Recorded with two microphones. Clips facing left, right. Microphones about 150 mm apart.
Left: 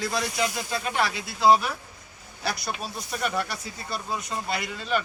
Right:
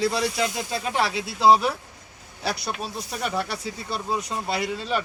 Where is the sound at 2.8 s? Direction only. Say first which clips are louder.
Right 1 dB; 25° right (ahead or behind).